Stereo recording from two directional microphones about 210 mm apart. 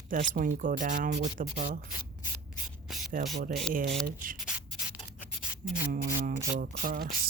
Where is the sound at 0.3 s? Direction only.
40° right (ahead or behind).